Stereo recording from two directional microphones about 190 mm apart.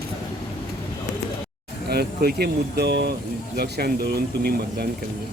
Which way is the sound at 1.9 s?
55° right (ahead or behind).